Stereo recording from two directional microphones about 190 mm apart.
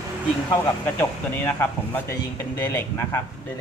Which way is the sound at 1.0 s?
10° left (ahead or behind).